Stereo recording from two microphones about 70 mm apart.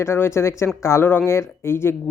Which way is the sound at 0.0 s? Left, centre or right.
Left.